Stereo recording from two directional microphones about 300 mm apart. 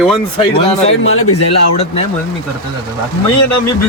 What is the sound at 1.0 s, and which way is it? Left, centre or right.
Speech, left.